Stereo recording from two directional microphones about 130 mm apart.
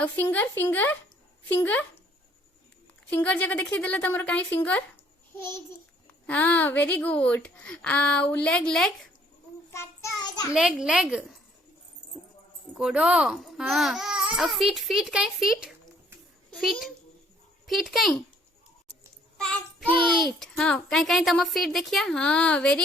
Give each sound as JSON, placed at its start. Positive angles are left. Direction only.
{"t": 0.0, "sound": "a woman's voice", "side_deg": 15}
{"t": 3.1, "sound": "a woman's voice", "side_deg": 10}
{"t": 6.2, "sound": "a woman's voice", "side_deg": 10}
{"t": 9.6, "sound": "child singing", "side_deg": 20}
{"t": 10.2, "sound": "a child's voice", "side_deg": 30}
{"t": 10.5, "sound": "speech", "side_deg": -5}
{"t": 12.7, "sound": "speech", "side_deg": -5}
{"t": 19.4, "sound": "child singing", "side_deg": 10}
{"t": 20.2, "sound": "speech", "side_deg": 5}